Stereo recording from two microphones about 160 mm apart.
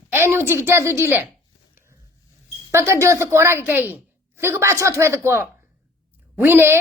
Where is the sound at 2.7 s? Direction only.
15° right (ahead or behind).